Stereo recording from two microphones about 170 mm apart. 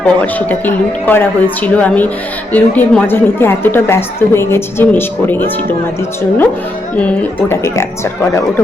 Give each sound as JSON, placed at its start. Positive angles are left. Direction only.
{"t": 0.0, "sound": "speech", "side_deg": 10}
{"t": 6.9, "sound": "speech", "side_deg": 10}